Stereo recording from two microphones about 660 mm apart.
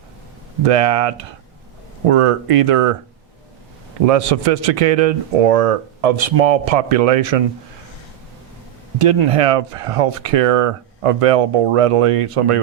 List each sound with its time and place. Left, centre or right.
0.6 s a man's voice: right
4.0 s a man's voice: right
9.0 s speech: right